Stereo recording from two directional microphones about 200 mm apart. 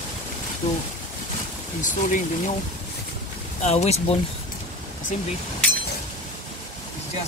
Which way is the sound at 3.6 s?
30° left (ahead or behind).